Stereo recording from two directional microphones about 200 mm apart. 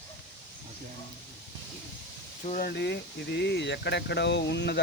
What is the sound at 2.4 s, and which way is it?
Speech, 45° left (ahead or behind).